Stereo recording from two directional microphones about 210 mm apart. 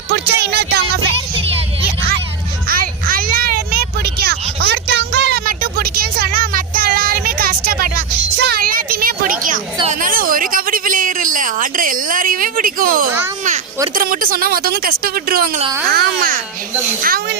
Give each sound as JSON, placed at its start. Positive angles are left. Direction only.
{"t": 0.1, "sound": "music", "side_deg": -50}
{"t": 2.6, "sound": "a sound", "side_deg": -40}
{"t": 13.9, "sound": "speech", "side_deg": -40}